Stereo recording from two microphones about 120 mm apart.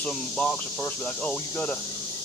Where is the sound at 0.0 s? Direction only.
10° left (ahead or behind).